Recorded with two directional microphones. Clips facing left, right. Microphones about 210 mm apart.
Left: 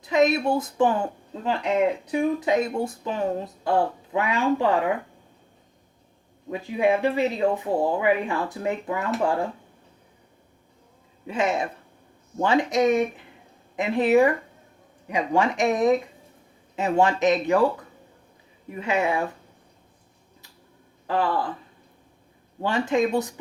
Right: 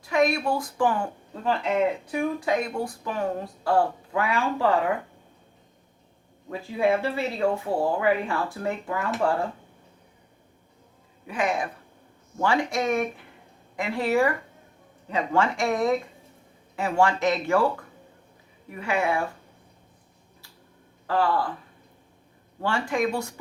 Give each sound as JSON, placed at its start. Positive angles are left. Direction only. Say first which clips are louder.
{"t": 0.0, "sound": "speech", "louder": "left 3 dB", "side_deg": 20}
{"t": 6.5, "sound": "speech", "louder": "left 1 dB", "side_deg": 15}
{"t": 11.3, "sound": "speech", "louder": "left 2 dB", "side_deg": 25}
{"t": 18.7, "sound": "speech", "louder": "left 1 dB", "side_deg": 20}
{"t": 22.6, "sound": "speech", "louder": "left 3 dB", "side_deg": 20}